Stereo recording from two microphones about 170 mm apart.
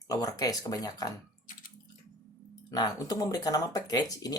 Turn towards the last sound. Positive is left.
turn(degrees=20)  # may be behind; listen again after turning